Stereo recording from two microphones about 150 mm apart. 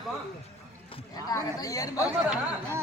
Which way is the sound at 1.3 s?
20° left (ahead or behind).